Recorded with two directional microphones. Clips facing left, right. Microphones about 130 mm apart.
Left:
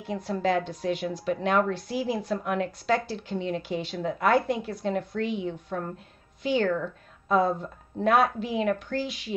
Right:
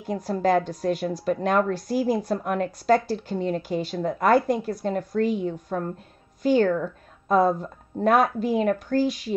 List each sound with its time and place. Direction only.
0.0 s a woman's voice: 40° right (ahead or behind)